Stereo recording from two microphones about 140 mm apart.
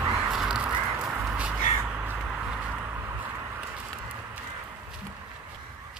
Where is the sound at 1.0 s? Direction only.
20° right (ahead or behind).